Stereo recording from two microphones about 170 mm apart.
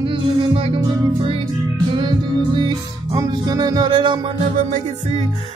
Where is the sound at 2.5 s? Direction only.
25° right (ahead or behind).